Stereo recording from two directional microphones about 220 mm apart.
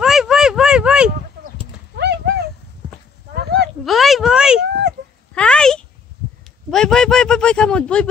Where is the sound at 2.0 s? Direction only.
50° right (ahead or behind).